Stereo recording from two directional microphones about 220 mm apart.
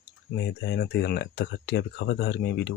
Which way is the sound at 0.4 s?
50° left (ahead or behind).